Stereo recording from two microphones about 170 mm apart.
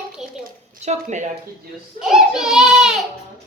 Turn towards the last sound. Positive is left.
turn(degrees=-5)  # may be behind; listen again after turning